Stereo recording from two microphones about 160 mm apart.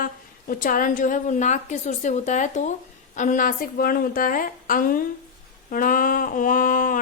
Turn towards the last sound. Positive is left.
turn(degrees=55)  # may be behind; listen again after turning